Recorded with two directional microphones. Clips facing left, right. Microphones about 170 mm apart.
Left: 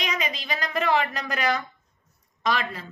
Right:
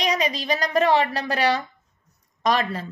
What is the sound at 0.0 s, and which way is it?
A woman's voice, 35° right (ahead or behind).